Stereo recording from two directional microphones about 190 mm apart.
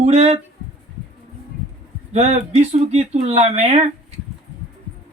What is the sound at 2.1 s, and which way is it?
Speech, 35° right (ahead or behind).